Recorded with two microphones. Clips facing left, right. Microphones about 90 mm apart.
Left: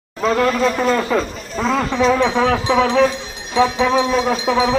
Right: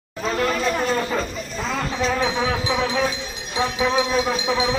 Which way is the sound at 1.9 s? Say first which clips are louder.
Left 6 dB; 75° left (ahead or behind).